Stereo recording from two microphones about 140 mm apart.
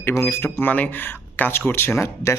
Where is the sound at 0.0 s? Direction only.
15° left (ahead or behind).